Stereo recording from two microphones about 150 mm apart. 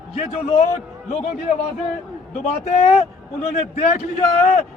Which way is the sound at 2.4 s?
45° left (ahead or behind).